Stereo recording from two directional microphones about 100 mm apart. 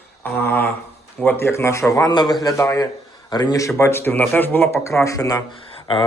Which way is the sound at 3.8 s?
25° left (ahead or behind).